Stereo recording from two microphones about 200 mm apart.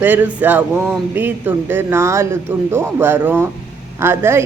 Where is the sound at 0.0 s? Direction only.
10° right (ahead or behind).